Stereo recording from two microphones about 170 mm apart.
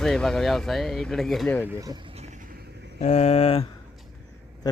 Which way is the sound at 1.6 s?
15° right (ahead or behind).